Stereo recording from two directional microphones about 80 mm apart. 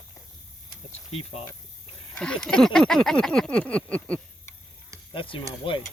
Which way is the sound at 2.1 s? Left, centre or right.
Centre.